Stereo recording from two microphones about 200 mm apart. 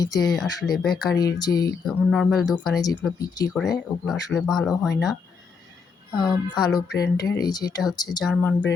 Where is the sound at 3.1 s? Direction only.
20° left (ahead or behind).